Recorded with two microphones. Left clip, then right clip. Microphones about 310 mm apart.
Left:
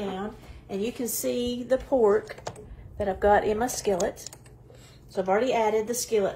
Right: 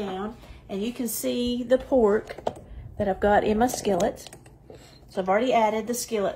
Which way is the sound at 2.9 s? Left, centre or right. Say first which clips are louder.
Even; right.